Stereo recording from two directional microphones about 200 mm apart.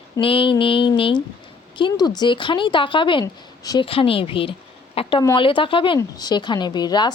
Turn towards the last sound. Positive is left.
turn(degrees=20)  # may be behind; listen again after turning